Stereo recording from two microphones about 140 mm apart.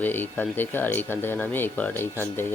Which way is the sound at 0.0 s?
15° left (ahead or behind).